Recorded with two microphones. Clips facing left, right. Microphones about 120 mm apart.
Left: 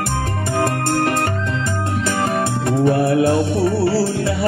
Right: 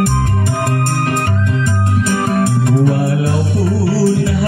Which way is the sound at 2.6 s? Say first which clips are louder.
Right 1 dB; 30° left (ahead or behind).